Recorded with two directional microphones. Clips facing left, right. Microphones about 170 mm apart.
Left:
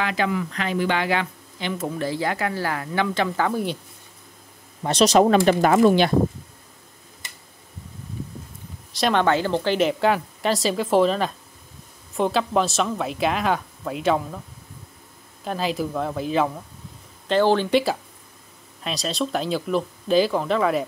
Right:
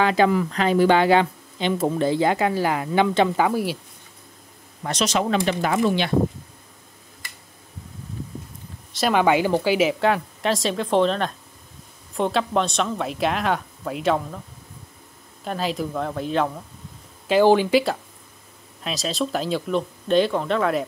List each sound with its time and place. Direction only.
0.0 s speech: 30° right (ahead or behind); by 3.7 s 10° right (ahead or behind)
4.8 s speech: 35° left (ahead or behind)
8.9 s a woman's voice: 5° right (ahead or behind)
15.4 s a woman's voice: centre (ahead or behind)
17.3 s a woman's voice: 10° right (ahead or behind)